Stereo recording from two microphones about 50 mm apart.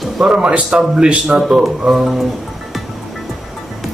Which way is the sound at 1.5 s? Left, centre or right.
Centre.